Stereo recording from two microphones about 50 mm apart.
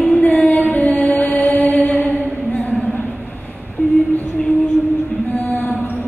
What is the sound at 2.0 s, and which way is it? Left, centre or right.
Mantra, left.